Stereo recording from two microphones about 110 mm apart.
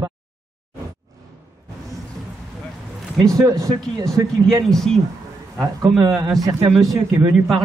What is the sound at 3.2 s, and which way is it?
A man's voice, 30° right (ahead or behind).